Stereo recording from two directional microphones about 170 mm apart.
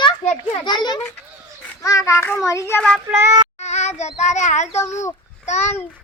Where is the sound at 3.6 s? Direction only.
40° left (ahead or behind).